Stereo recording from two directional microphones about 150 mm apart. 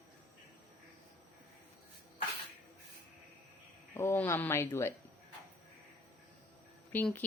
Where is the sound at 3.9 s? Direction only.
15° left (ahead or behind).